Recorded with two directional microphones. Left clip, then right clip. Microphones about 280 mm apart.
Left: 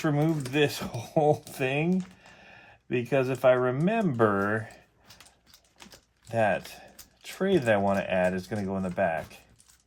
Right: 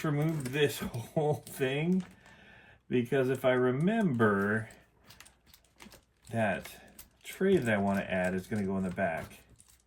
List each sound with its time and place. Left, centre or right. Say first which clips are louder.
0.0 s speech: left 6 dB; left
2.9 s speech: left 3 dB; left
6.2 s speech: left 6 dB; left